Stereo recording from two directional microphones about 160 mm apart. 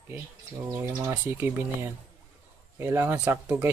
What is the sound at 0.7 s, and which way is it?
Speech, 20° right (ahead or behind).